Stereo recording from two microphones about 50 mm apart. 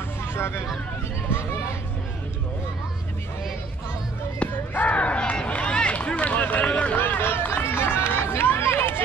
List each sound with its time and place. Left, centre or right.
0.2 s vehicle: left
4.4 s speech: left
4.9 s run: left
7.2 s run: left